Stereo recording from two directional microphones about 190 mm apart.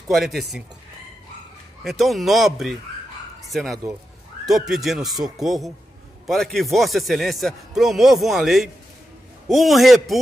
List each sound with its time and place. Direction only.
0.1 s a man's voice: centre (ahead or behind)
1.9 s a man's voice: centre (ahead or behind)